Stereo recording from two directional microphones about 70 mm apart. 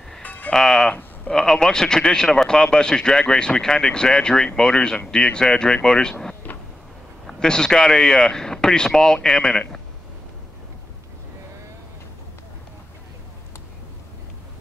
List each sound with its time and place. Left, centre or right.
0.2 s music: left
0.5 s music: centre
1.3 s speech: centre